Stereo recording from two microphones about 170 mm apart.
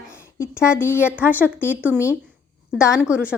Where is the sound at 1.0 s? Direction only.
10° right (ahead or behind).